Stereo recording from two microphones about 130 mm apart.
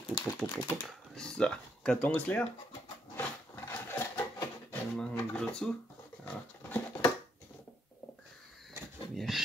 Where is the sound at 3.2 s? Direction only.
15° left (ahead or behind).